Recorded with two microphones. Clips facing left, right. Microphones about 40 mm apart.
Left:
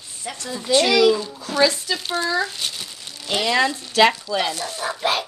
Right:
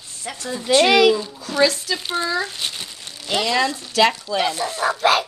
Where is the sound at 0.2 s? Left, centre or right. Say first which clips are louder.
Right 2 dB; centre.